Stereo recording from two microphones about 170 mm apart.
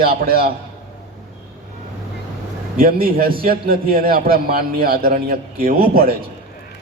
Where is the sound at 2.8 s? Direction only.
60° right (ahead or behind).